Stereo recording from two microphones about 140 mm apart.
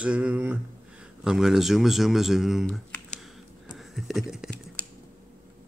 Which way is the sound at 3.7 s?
Centre (ahead or behind).